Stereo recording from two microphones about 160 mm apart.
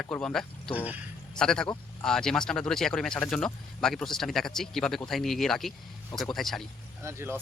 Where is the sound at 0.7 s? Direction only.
10° right (ahead or behind).